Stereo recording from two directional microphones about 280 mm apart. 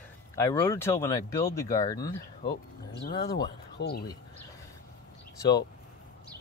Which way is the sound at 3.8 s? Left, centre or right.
Left.